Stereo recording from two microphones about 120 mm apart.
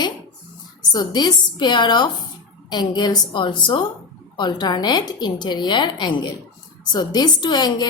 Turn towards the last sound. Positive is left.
turn(degrees=35)  # may be behind; listen again after turning